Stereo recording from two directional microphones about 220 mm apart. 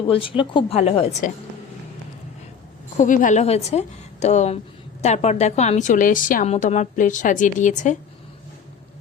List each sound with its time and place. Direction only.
0.1 s speech: 25° left (ahead or behind)
3.0 s a woman's voice: 35° left (ahead or behind)